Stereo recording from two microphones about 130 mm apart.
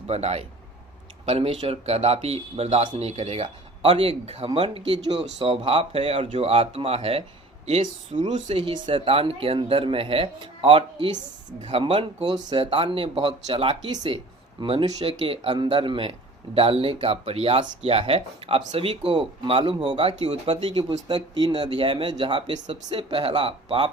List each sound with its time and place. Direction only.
0.1 s speech: 55° right (ahead or behind)